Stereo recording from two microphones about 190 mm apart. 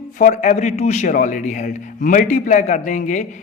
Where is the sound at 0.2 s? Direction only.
40° left (ahead or behind).